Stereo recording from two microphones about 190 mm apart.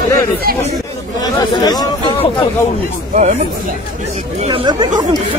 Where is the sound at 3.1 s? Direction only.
40° right (ahead or behind).